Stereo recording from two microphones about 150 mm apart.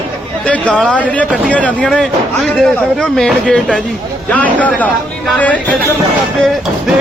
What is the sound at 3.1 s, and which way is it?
Speech, 5° left (ahead or behind).